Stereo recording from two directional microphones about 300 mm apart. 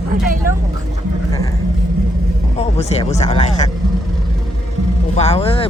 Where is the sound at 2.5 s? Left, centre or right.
Left.